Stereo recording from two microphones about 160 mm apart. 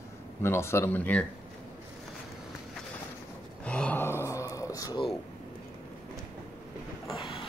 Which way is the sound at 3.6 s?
10° left (ahead or behind).